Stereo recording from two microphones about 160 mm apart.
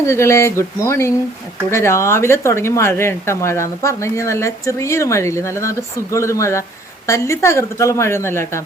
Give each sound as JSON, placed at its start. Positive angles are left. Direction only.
{"t": 0.0, "sound": "speech", "side_deg": 15}